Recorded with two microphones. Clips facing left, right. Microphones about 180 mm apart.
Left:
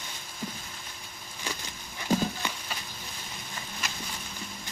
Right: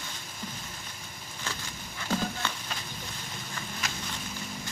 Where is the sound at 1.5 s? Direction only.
15° left (ahead or behind).